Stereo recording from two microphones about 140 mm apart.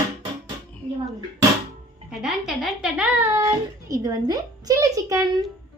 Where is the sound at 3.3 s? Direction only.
25° right (ahead or behind).